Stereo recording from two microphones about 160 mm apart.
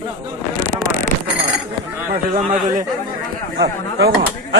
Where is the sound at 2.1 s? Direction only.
55° right (ahead or behind).